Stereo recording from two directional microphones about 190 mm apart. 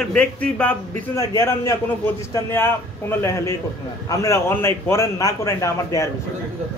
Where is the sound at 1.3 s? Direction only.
15° left (ahead or behind).